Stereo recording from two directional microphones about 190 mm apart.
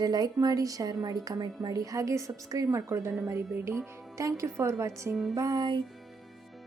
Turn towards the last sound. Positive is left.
turn(degrees=0)  # may be behind; listen again after turning